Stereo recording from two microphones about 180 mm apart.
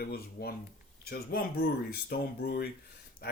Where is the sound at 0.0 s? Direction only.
60° left (ahead or behind).